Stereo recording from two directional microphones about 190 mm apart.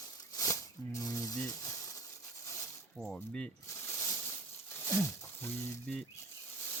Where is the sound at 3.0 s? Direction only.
5° left (ahead or behind).